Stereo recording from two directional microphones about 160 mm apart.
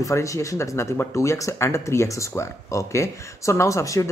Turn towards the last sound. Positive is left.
turn(degrees=20)  # may be behind; listen again after turning